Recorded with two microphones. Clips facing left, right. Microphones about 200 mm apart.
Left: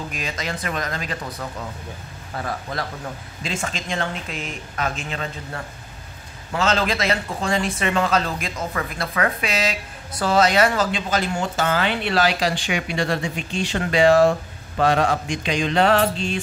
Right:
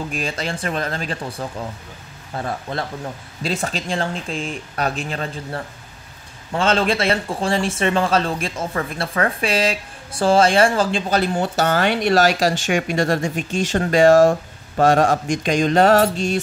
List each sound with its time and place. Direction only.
0.1 s speech: 30° right (ahead or behind)